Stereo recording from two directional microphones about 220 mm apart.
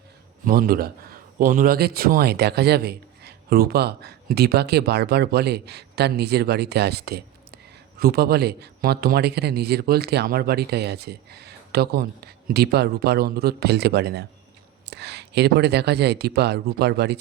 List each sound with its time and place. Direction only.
0.4 s a man's voice: 40° right (ahead or behind)